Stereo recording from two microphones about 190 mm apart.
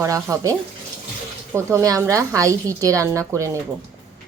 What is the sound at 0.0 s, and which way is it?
Speech, 15° right (ahead or behind).